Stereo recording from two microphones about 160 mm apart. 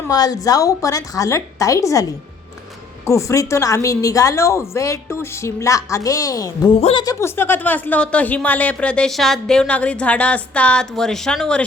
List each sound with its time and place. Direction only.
0.1 s a woman's voice: 25° left (ahead or behind)
3.1 s a woman's voice: 20° left (ahead or behind)
6.7 s a woman's voice: 40° left (ahead or behind)
7.0 s speech: 20° left (ahead or behind); by 11.6 s 5° left (ahead or behind)